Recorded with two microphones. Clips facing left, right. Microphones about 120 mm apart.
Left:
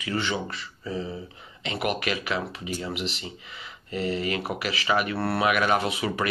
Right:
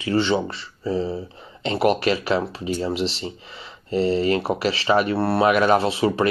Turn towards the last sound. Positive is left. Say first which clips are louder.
# right 7 dB
turn(degrees=-30)  # may be behind; listen again after turning